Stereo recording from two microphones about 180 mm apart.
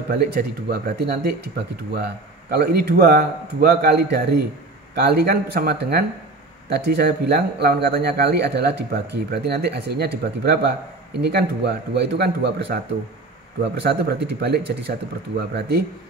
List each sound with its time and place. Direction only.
0.1 s speech: 60° right (ahead or behind)
2.5 s a man's voice: 60° right (ahead or behind)
15.3 s a man's voice: 70° right (ahead or behind)